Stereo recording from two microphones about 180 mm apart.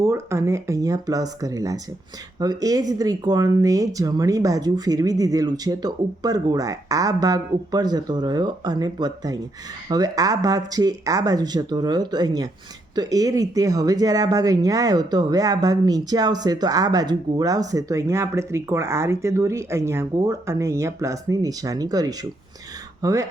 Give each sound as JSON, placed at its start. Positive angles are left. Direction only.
{"t": 0.0, "sound": "speech", "side_deg": -15}